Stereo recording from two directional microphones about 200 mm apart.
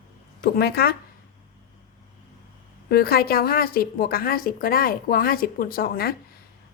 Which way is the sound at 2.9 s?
50° left (ahead or behind).